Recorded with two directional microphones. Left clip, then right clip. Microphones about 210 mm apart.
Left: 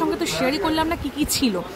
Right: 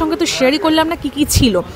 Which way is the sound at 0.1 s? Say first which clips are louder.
Right 8 dB; 30° right (ahead or behind).